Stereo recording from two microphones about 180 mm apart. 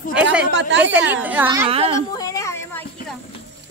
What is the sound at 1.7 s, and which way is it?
Speech, 30° right (ahead or behind).